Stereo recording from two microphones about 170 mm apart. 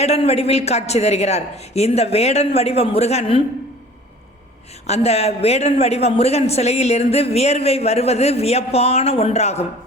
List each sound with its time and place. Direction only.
0.0 s speech: 35° left (ahead or behind)
4.9 s speech: 40° left (ahead or behind)